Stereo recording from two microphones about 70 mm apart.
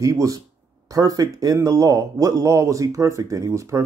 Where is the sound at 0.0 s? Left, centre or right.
Right.